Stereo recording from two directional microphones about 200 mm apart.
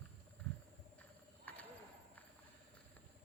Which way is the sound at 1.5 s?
10° left (ahead or behind).